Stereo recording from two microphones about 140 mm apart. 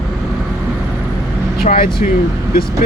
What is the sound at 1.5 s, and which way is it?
Speech, 90° left.